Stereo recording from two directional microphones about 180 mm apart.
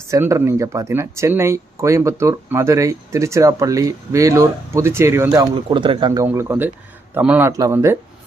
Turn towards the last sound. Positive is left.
turn(degrees=-15)  # may be behind; listen again after turning